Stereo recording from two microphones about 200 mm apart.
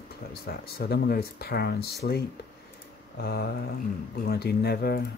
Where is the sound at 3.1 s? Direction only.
50° left (ahead or behind).